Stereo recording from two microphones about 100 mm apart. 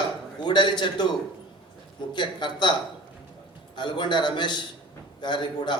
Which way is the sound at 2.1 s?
50° left (ahead or behind).